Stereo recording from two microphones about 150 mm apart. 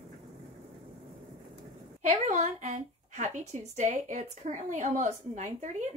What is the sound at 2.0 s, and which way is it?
A woman's voice, 55° right (ahead or behind).